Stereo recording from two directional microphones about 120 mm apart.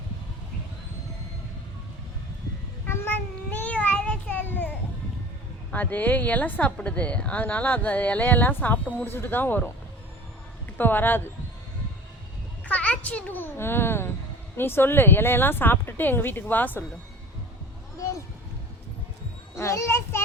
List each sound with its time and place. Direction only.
2.8 s a sound: 20° left (ahead or behind)
5.7 s a woman's voice: 15° left (ahead or behind)
10.8 s a woman's voice: 15° left (ahead or behind)
12.6 s a child's voice: 10° left (ahead or behind)
19.5 s a child's voice: 20° left (ahead or behind)